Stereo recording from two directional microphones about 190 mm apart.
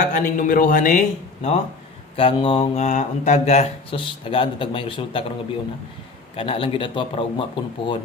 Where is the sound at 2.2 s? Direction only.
25° left (ahead or behind).